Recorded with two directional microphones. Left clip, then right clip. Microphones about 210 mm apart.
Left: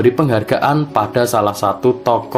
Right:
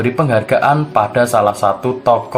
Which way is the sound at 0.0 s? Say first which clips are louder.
Left 1 dB; 40° left (ahead or behind).